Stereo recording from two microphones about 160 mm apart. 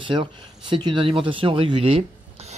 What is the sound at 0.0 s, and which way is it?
Speech, 30° right (ahead or behind).